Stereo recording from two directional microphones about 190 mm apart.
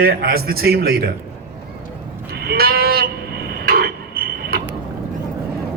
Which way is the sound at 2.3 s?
55° right (ahead or behind).